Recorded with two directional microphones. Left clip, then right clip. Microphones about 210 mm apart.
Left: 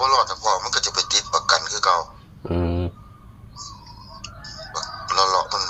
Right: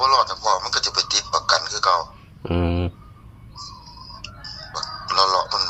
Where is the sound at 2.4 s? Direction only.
15° right (ahead or behind).